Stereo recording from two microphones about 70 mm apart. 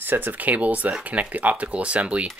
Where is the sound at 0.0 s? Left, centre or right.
Right.